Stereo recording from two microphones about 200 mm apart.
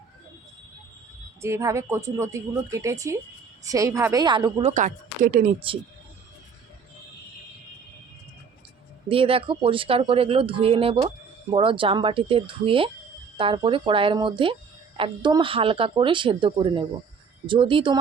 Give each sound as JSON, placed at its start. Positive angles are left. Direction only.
{"t": 1.4, "sound": "a woman's voice", "side_deg": -15}
{"t": 4.7, "sound": "a woman's voice", "side_deg": -40}
{"t": 9.0, "sound": "speech", "side_deg": -25}